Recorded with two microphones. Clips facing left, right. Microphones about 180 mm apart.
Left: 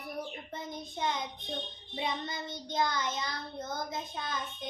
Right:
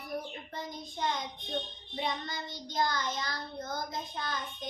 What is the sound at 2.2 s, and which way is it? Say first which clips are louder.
Child singing: left 2 dB; 25° left (ahead or behind).